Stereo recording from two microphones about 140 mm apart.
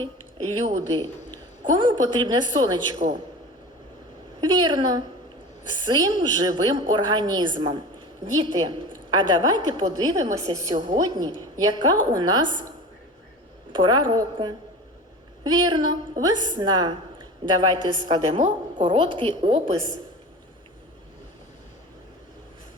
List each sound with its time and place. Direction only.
1.6 s a woman's voice: 30° right (ahead or behind)
4.4 s a woman's voice: 35° right (ahead or behind)
9.0 s a woman's voice: 35° right (ahead or behind)
13.7 s a woman's voice: 35° right (ahead or behind)